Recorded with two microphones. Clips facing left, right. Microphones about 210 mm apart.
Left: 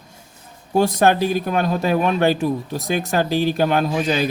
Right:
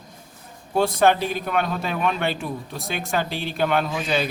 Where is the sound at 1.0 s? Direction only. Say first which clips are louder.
Left 3 dB; 40° left (ahead or behind).